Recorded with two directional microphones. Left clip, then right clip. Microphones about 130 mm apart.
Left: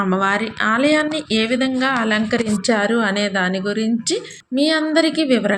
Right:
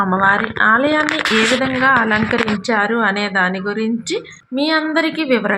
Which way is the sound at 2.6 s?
25° left (ahead or behind).